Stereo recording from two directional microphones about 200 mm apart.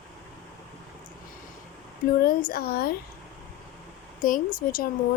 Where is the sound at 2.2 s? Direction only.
45° left (ahead or behind).